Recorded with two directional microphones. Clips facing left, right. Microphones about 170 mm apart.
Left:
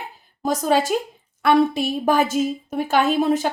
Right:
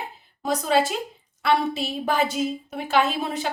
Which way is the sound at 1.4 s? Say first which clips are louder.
Left 6 dB; 50° left (ahead or behind).